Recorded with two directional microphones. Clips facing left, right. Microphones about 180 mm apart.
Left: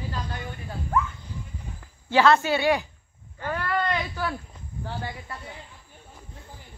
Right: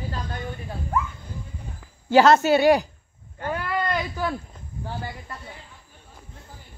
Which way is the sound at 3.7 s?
5° right (ahead or behind).